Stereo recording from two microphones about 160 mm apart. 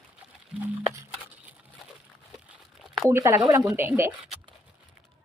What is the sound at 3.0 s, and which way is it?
Speech, 20° right (ahead or behind).